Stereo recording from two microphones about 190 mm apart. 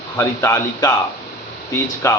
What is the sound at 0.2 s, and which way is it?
A man's voice, 15° left (ahead or behind).